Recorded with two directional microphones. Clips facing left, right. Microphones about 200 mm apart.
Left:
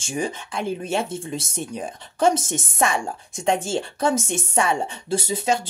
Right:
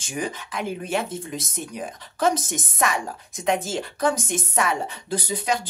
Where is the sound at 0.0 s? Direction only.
25° left (ahead or behind).